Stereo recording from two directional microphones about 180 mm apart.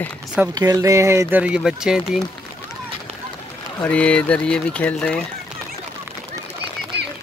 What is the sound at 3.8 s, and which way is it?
Speech, 5° left (ahead or behind).